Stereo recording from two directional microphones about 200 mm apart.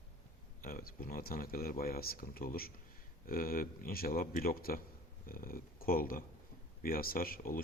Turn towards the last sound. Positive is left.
turn(degrees=45)  # may be behind; listen again after turning